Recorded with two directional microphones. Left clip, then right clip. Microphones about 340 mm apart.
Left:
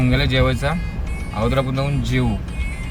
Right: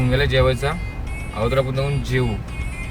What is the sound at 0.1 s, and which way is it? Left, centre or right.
Speech, centre.